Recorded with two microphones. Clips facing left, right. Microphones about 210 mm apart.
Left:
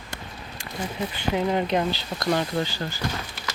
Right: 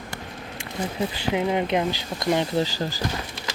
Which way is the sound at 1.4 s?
15° right (ahead or behind).